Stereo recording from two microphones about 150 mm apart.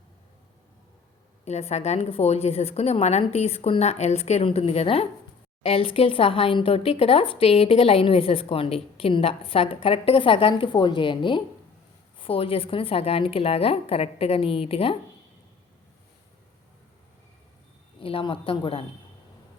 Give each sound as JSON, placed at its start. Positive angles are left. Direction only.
{"t": 1.5, "sound": "a woman's voice", "side_deg": 45}
{"t": 18.0, "sound": "speech", "side_deg": 35}